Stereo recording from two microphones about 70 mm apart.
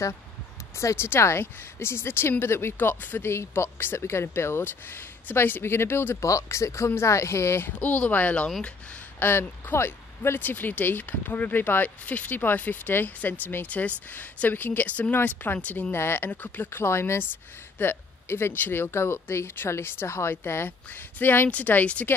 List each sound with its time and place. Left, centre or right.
0.7 s speech: left
6.2 s speech: left
7.8 s speech: left
15.9 s speech: left